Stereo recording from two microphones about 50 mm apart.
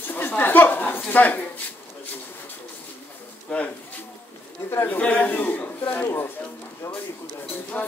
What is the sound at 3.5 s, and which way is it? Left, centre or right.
Speech, left.